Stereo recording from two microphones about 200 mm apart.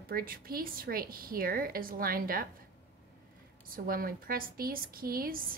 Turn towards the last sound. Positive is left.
turn(degrees=-45)  # may be behind; listen again after turning